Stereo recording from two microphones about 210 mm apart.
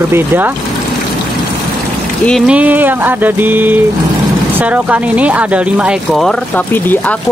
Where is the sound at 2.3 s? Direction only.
Centre (ahead or behind).